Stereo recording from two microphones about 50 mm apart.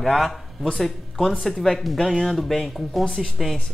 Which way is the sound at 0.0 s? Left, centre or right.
Centre.